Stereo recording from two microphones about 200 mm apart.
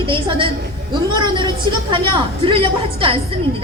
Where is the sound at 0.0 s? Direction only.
25° right (ahead or behind).